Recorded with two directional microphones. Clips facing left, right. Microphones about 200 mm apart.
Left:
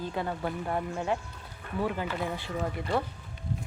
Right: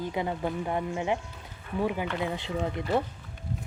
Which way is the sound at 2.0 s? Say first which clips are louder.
Right 2 dB; centre (ahead or behind).